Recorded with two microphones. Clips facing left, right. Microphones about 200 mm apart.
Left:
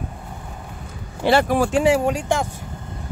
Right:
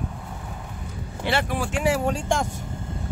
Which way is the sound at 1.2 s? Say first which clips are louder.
Left 8 dB; 40° left (ahead or behind).